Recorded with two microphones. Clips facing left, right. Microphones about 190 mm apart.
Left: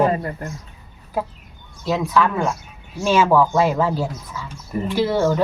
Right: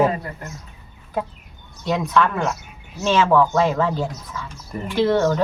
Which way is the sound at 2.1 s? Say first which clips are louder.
Left 1 dB; 5° left (ahead or behind).